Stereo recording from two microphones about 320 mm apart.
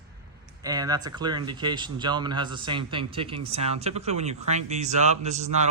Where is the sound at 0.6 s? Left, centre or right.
Centre.